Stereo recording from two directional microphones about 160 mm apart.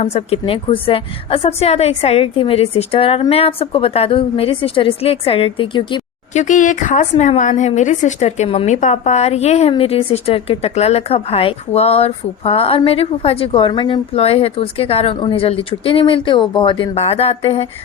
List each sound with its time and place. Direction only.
0.0 s a woman's voice: 40° left (ahead or behind)
6.3 s a woman's voice: 50° left (ahead or behind)